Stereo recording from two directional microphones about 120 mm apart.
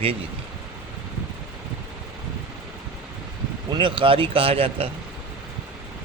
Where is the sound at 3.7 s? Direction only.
45° right (ahead or behind).